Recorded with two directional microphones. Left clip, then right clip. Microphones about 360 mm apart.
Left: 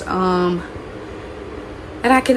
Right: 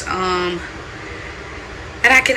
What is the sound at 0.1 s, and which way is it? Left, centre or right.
Speech, centre.